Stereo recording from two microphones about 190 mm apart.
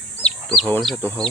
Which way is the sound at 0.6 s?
5° left (ahead or behind).